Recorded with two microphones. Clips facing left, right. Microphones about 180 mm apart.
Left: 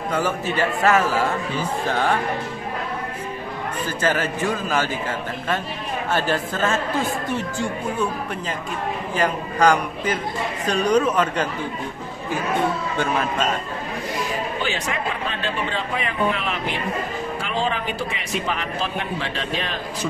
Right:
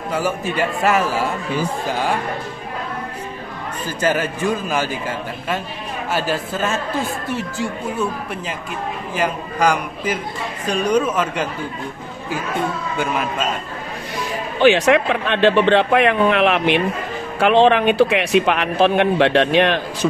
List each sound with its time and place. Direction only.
0.1 s a man's voice: 10° right (ahead or behind)
4.0 s a man's voice: 15° right (ahead or behind)
6.1 s a man's voice: 10° right (ahead or behind)
9.2 s a man's voice: 10° right (ahead or behind)
14.6 s speech: 75° right (ahead or behind)